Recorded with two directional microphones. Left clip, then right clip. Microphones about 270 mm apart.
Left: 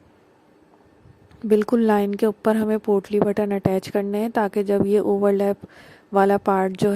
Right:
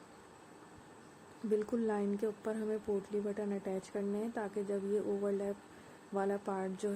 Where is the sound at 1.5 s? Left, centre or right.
Left.